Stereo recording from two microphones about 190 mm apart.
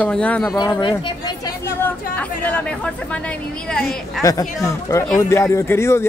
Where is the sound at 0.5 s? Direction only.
20° left (ahead or behind).